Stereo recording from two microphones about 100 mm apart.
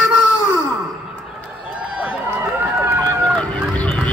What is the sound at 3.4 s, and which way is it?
Fowl, 15° left (ahead or behind).